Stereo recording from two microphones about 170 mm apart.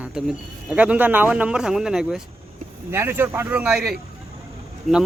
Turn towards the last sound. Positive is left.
turn(degrees=0)  # may be behind; listen again after turning